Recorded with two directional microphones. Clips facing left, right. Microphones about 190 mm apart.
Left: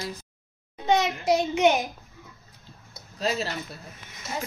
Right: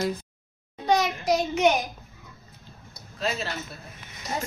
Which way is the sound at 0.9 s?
25° left (ahead or behind).